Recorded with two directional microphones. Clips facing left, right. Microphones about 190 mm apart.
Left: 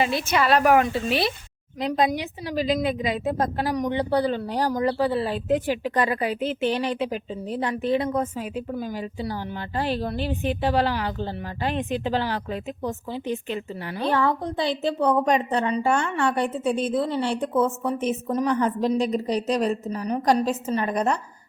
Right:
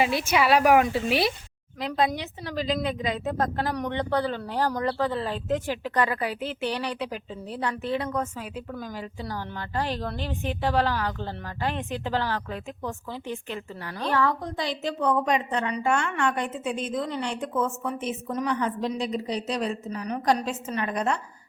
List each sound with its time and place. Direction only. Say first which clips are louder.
0.0 s speech: even; 10° right (ahead or behind)
1.8 s a woman's voice: left 3 dB; 15° left (ahead or behind); by 21.2 s 40° left (ahead or behind)